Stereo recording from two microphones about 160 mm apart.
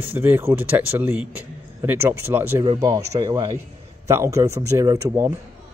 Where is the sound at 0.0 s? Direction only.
15° right (ahead or behind).